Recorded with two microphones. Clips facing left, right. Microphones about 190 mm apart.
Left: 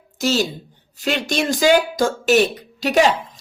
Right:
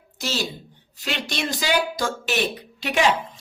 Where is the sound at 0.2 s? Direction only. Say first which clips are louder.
Left 8 dB; 45° left (ahead or behind).